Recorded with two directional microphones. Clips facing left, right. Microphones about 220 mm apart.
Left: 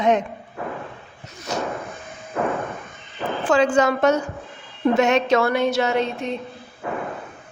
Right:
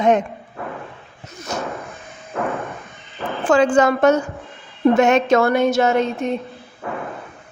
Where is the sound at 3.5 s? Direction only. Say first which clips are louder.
Right 3 dB; 50° right (ahead or behind).